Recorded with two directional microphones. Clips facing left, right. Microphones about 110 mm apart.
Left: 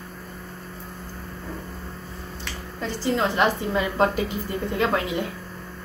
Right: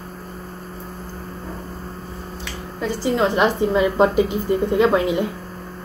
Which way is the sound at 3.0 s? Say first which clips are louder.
Right 4 dB; 20° right (ahead or behind).